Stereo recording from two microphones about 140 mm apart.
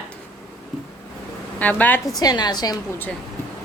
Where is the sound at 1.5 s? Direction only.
10° left (ahead or behind).